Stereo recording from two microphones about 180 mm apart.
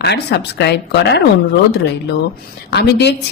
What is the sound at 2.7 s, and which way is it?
Speech, 70° left (ahead or behind).